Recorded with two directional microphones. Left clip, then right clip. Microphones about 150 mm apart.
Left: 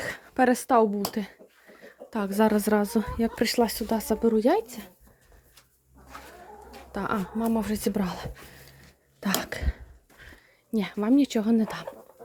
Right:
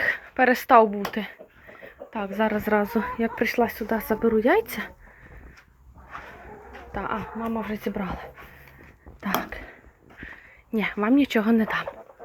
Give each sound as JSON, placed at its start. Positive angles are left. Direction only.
{"t": 0.0, "sound": "a sound", "side_deg": 40}
{"t": 0.5, "sound": "a woman's voice", "side_deg": 30}
{"t": 2.0, "sound": "a woman's voice", "side_deg": 60}
{"t": 4.6, "sound": "speech", "side_deg": -5}
{"t": 6.9, "sound": "speech", "side_deg": 60}
{"t": 9.4, "sound": "a sound", "side_deg": 65}
{"t": 10.7, "sound": "a woman's voice", "side_deg": 25}